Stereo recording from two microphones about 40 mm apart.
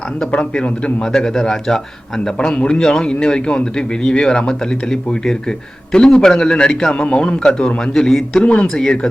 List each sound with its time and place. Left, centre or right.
0.3 s speech: left
1.0 s a man's voice: centre
7.9 s a man's voice: centre